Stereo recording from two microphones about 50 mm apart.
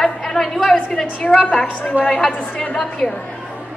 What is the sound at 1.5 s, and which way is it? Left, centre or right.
Speech, left.